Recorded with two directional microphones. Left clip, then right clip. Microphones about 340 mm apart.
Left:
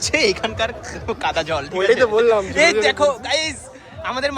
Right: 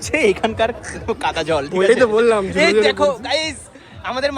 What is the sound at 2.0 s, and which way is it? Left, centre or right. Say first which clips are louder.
Speech: right 1 dB; right.